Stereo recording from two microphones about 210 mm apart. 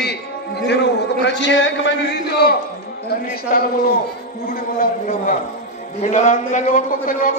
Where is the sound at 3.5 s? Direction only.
40° left (ahead or behind).